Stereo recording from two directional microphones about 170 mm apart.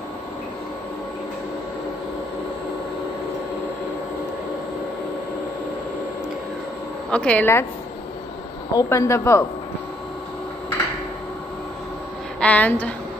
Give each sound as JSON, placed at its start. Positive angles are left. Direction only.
{"t": 7.1, "sound": "a man's voice", "side_deg": 5}
{"t": 8.7, "sound": "a man's voice", "side_deg": 15}
{"t": 12.4, "sound": "a man's voice", "side_deg": 10}